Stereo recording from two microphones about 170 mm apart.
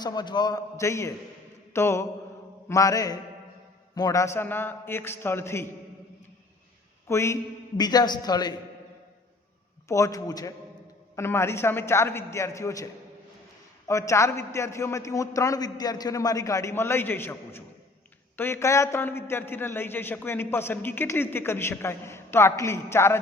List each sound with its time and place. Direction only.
0.0 s a man's voice: 25° left (ahead or behind)
7.1 s a man's voice: 15° left (ahead or behind)
9.9 s a man's voice: 20° left (ahead or behind)